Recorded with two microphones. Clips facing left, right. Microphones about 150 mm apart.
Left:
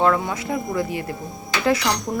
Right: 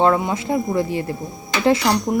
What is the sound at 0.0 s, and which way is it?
Speech, 25° right (ahead or behind).